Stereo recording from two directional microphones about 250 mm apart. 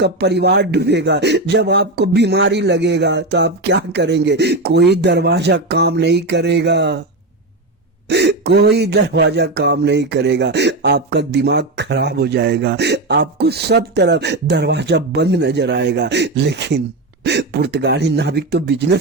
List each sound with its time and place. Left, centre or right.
0.0 s speech: right
8.0 s speech: right